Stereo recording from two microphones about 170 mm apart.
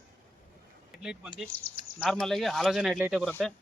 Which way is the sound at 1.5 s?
60° right (ahead or behind).